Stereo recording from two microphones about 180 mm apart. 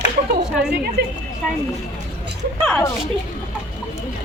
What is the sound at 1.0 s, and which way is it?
Speech, 65° right (ahead or behind).